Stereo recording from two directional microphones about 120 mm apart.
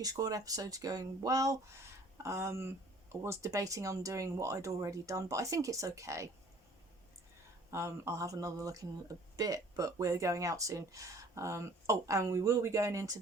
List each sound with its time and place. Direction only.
0.0 s speech: 30° right (ahead or behind)
7.7 s speech: 20° right (ahead or behind)